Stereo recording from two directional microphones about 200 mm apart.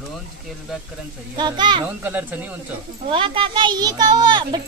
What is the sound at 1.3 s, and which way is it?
Speech, 20° right (ahead or behind).